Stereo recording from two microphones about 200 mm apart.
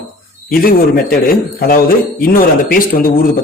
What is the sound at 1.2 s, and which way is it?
A man's voice, 45° left (ahead or behind).